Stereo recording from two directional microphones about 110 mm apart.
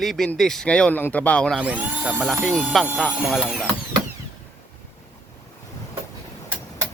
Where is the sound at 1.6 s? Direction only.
10° right (ahead or behind).